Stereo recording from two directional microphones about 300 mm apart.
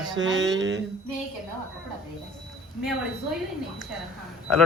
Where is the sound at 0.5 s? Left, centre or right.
Right.